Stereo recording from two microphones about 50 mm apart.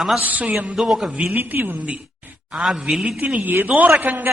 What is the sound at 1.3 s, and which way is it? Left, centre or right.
Speech, right.